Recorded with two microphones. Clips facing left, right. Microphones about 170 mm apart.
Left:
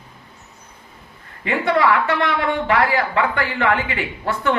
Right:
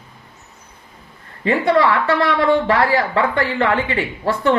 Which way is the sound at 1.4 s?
30° right (ahead or behind).